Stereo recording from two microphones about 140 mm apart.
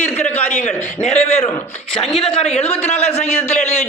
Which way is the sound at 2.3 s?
45° left (ahead or behind).